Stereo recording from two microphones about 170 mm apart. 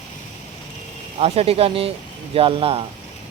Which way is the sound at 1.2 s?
35° right (ahead or behind).